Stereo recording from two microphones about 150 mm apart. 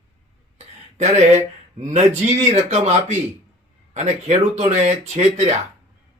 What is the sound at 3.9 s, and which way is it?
Speech, 50° right (ahead or behind).